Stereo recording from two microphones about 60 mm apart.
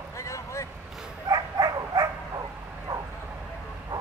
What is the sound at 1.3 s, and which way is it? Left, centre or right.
Dog, right.